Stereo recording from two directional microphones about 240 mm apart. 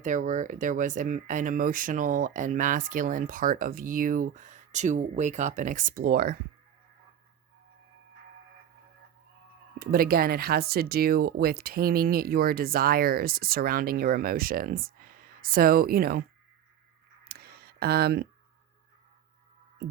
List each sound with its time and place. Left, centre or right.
0.0 s speech: right
9.7 s speech: right
17.2 s a sound: right